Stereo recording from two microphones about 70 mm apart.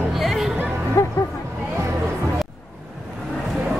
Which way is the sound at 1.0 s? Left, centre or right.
Left.